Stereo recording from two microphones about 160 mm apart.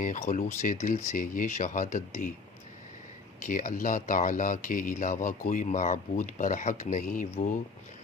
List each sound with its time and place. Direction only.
0.0 s speech: 50° left (ahead or behind)
3.4 s speech: 55° left (ahead or behind)